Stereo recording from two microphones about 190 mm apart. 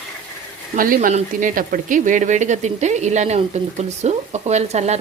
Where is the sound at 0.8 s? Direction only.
45° right (ahead or behind).